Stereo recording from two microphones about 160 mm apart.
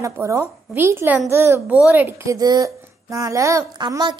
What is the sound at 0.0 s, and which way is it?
A woman's voice, 20° right (ahead or behind).